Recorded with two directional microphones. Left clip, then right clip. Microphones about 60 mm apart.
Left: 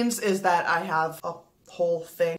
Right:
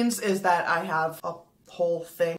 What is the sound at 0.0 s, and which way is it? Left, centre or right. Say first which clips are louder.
Speech: left 1 dB; left.